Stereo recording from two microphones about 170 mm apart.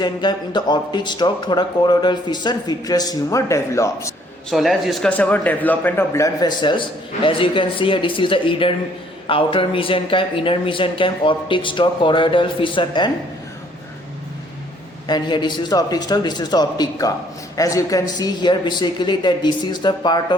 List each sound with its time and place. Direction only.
0.0 s a man's voice: 25° left (ahead or behind)
4.4 s a man's voice: centre (ahead or behind); by 13.1 s 30° left (ahead or behind)
15.0 s a man's voice: 25° left (ahead or behind)